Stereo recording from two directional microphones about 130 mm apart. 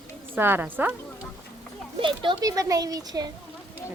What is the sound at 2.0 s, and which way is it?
Speech, 35° right (ahead or behind).